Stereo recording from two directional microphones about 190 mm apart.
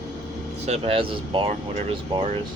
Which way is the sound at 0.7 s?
30° right (ahead or behind).